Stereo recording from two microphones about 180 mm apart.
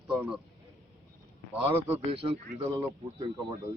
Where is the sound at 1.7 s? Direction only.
10° right (ahead or behind).